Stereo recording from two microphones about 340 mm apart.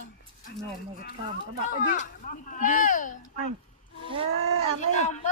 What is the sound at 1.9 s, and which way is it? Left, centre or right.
Speech, left.